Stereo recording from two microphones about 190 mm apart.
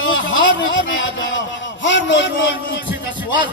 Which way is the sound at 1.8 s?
70° left (ahead or behind).